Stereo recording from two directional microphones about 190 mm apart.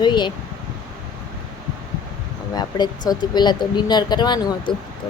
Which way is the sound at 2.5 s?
20° left (ahead or behind).